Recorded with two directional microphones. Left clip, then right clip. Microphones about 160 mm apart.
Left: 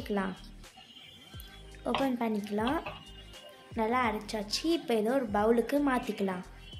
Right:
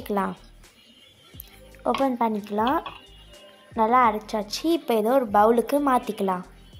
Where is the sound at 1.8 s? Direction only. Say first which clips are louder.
Right 8 dB; 10° right (ahead or behind).